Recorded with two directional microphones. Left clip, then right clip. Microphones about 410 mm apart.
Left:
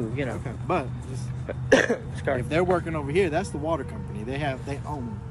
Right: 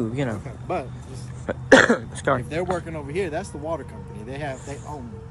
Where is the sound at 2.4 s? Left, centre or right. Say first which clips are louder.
Left 3 dB; centre.